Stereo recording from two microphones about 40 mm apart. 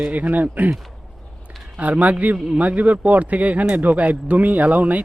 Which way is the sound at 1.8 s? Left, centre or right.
Right.